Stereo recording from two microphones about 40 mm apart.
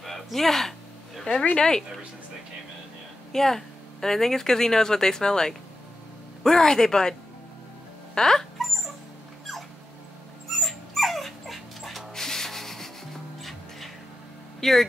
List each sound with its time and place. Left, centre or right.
0.0 s a sound: centre
3.3 s speech: centre
10.5 s dog: centre
12.1 s sanding: centre
13.4 s music: centre
14.6 s speech: centre